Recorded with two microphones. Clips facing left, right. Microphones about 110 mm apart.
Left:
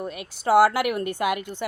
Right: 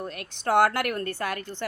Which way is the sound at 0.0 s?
5° left (ahead or behind).